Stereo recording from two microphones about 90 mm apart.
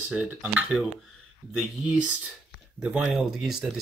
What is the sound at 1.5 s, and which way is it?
Speech, 10° right (ahead or behind).